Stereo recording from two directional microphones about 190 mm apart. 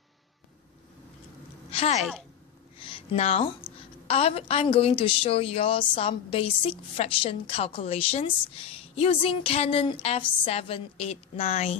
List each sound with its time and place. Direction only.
1.7 s speech: 35° left (ahead or behind)
2.8 s a sound: 30° left (ahead or behind)
4.1 s a woman's voice: 30° left (ahead or behind)